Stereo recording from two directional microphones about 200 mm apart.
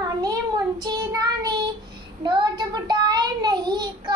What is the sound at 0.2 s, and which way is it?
Child singing, 20° right (ahead or behind).